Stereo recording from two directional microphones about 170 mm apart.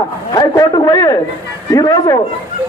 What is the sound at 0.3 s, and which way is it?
A man's voice, 20° left (ahead or behind).